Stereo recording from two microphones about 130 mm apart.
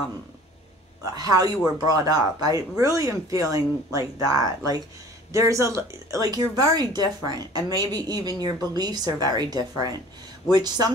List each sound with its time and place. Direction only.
1.1 s a woman's voice: 30° right (ahead or behind)